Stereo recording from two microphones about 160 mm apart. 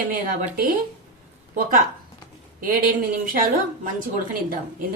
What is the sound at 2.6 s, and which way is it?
A woman's voice, 60° right (ahead or behind).